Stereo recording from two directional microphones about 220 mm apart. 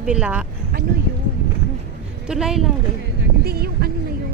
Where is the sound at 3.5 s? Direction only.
45° right (ahead or behind).